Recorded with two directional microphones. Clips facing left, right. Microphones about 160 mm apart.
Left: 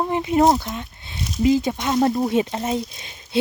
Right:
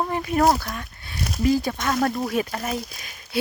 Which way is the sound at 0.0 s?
20° left (ahead or behind).